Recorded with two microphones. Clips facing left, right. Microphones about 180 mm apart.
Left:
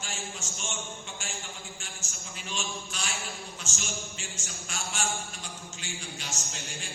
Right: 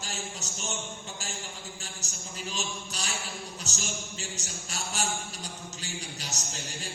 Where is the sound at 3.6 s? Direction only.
40° right (ahead or behind).